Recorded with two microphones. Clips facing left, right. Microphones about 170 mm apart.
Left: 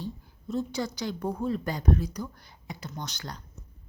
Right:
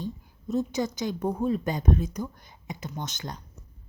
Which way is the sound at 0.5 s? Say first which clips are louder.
Right 3 dB; 20° right (ahead or behind).